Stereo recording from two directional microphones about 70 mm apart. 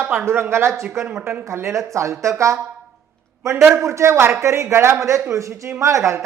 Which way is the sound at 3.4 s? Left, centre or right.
Right.